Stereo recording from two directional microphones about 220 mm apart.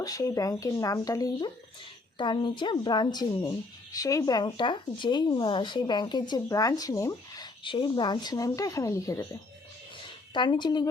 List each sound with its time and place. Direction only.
0.0 s speech: 15° left (ahead or behind)